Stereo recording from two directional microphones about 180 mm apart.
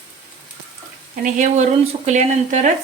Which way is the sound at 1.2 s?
40° right (ahead or behind).